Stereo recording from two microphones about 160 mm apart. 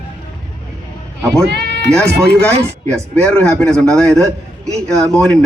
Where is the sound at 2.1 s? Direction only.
90° right.